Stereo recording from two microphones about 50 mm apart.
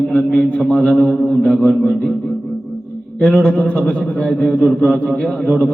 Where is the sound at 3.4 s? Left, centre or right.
Left.